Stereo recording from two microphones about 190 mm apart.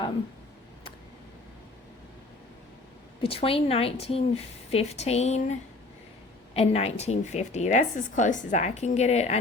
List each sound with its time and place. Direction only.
3.2 s a woman's voice: 30° left (ahead or behind)